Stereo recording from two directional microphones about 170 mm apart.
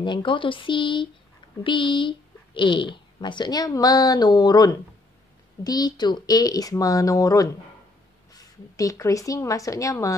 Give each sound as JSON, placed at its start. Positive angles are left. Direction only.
{"t": 0.0, "sound": "speech", "side_deg": 30}